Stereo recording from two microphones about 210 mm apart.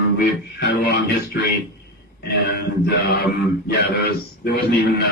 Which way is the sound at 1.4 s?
55° left (ahead or behind).